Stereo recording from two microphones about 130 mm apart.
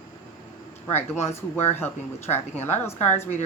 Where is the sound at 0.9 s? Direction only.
20° left (ahead or behind).